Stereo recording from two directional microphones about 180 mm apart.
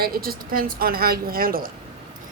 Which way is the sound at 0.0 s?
55° right (ahead or behind).